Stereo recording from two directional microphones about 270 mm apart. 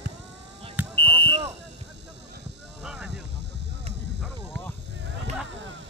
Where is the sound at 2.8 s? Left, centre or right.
Centre.